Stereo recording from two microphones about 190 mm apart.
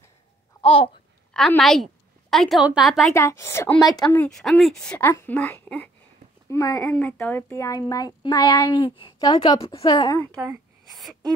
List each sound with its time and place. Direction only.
0.6 s babbling: 30° left (ahead or behind)
1.3 s a woman's voice: 5° left (ahead or behind)
3.2 s a woman's voice: 15° left (ahead or behind)
10.9 s gasp: centre (ahead or behind)